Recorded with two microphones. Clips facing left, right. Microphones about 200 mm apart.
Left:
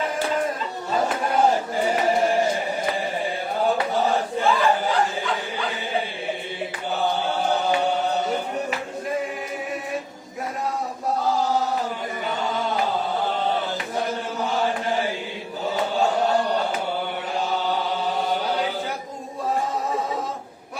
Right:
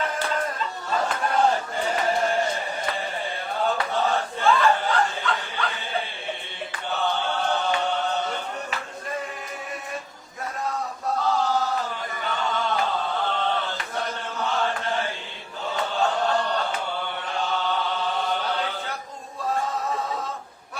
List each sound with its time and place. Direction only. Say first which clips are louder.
0.9 s chatter: left 3 dB; 15° left (ahead or behind)
1.5 s chant: left 3 dB; 15° left (ahead or behind)
3.6 s chant: left 3 dB; 10° left (ahead or behind)
4.6 s chuckle: left 1 dB; 15° left (ahead or behind)
6.9 s chant: left 2 dB; 10° left (ahead or behind)
12.2 s chant: left 1 dB; 20° left (ahead or behind)